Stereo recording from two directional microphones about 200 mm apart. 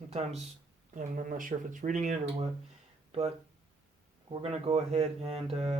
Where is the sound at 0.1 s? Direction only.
30° right (ahead or behind).